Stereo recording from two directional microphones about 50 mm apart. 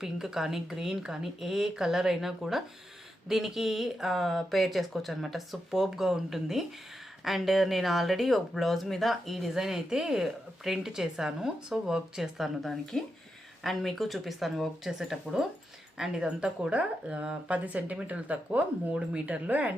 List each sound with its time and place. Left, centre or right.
0.0 s speech: centre
12.9 s speech: centre
13.7 s speech: centre
16.0 s speech: centre